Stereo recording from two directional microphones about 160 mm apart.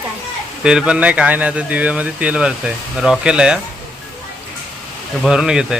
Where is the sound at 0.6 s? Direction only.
5° right (ahead or behind).